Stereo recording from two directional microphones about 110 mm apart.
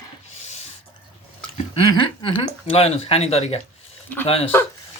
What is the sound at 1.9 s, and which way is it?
A man's voice, 50° left (ahead or behind).